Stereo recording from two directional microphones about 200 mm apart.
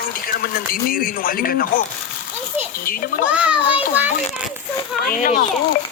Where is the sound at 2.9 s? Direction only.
45° left (ahead or behind).